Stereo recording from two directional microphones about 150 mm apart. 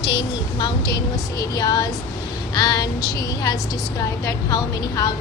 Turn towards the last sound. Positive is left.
turn(degrees=25)  # may be behind; listen again after turning